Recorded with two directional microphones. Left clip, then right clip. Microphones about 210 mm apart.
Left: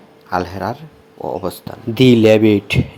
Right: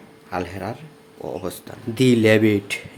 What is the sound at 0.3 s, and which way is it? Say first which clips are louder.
Speech: left 8 dB; 20° left (ahead or behind).